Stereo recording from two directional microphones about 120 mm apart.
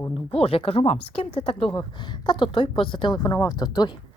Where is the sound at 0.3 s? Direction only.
55° left (ahead or behind).